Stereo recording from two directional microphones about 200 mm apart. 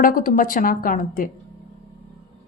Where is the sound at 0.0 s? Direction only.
45° left (ahead or behind).